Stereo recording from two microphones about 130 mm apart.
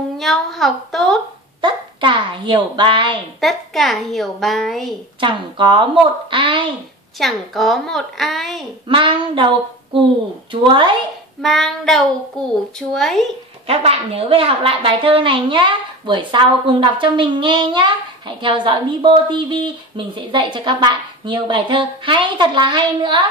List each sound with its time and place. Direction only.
0.2 s a child's voice: centre (ahead or behind)
1.6 s a child's voice: 40° right (ahead or behind)
3.3 s a child's voice: centre (ahead or behind)
5.2 s a woman's voice: 40° right (ahead or behind)
7.2 s a child's voice: centre (ahead or behind)
8.8 s a woman's voice: 40° right (ahead or behind)
10.5 s a woman's voice: 40° right (ahead or behind)
11.4 s a child's voice: centre (ahead or behind)
13.7 s a woman's voice: 50° right (ahead or behind)